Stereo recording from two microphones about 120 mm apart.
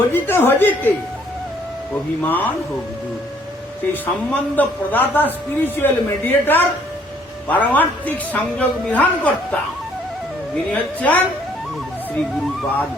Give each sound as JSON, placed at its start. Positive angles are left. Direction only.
{"t": 0.1, "sound": "speech", "side_deg": 20}
{"t": 2.2, "sound": "speech", "side_deg": 15}
{"t": 4.0, "sound": "speech", "side_deg": 15}
{"t": 10.7, "sound": "speech", "side_deg": 10}